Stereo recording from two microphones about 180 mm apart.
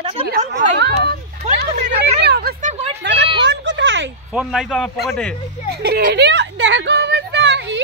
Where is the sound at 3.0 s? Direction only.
70° right (ahead or behind).